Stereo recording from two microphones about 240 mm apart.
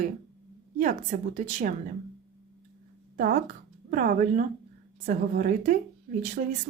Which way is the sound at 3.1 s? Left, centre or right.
Right.